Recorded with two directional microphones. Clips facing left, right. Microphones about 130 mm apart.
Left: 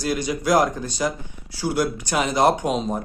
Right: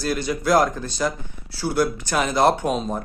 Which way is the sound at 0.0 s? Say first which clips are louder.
Even; 15° left (ahead or behind).